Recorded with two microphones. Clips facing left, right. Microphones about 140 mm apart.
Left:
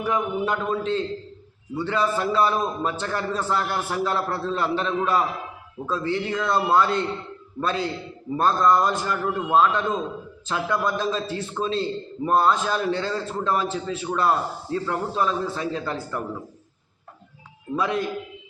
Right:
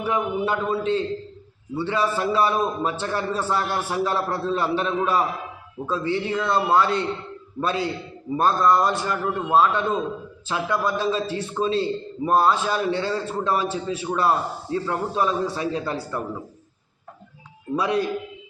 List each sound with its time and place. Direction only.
0.0 s a man's voice: 10° right (ahead or behind)
17.7 s a man's voice: 15° right (ahead or behind)